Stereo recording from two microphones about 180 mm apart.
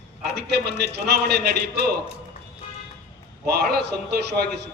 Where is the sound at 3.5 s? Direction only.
60° right (ahead or behind).